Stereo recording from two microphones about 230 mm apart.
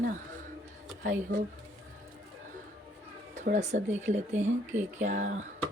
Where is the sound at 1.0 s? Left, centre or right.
Right.